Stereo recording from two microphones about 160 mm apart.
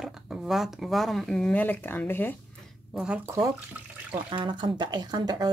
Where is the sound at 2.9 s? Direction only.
5° right (ahead or behind).